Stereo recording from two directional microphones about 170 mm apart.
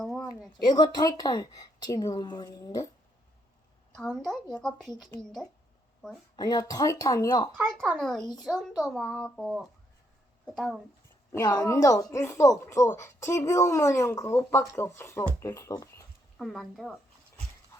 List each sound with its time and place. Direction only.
0.0 s a sound: centre (ahead or behind)
0.5 s a woman's voice: 25° left (ahead or behind)
3.9 s a woman's voice: centre (ahead or behind)
6.3 s a woman's voice: 25° left (ahead or behind)
7.6 s a woman's voice: 5° left (ahead or behind)
11.3 s speech: 20° left (ahead or behind)
16.4 s a woman's voice: centre (ahead or behind)